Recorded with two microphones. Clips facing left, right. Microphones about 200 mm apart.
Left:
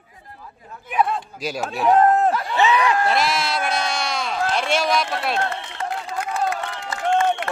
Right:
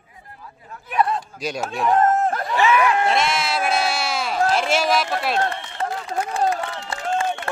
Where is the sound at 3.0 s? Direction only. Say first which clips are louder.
Even; centre (ahead or behind).